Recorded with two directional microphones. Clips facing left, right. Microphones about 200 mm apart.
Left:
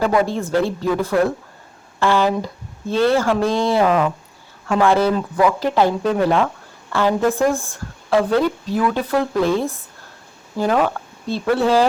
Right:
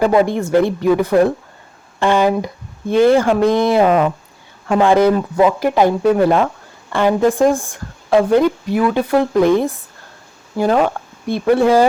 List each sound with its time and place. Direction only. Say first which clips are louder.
0.0 s speech: right 4 dB; 20° right (ahead or behind)
10.8 s speech: right 3 dB; 15° right (ahead or behind)